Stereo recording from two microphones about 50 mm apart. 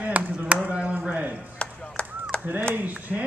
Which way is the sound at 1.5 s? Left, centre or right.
Left.